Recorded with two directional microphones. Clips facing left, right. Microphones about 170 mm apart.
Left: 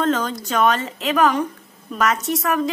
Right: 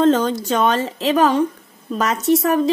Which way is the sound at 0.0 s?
30° right (ahead or behind).